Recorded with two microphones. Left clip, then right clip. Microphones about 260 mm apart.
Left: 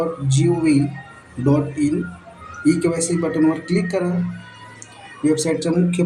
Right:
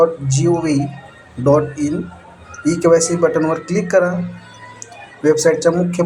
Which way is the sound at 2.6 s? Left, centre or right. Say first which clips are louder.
Right 6 dB; centre.